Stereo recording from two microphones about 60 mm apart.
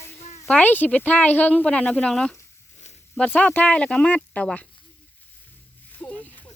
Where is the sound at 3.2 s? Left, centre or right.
Left.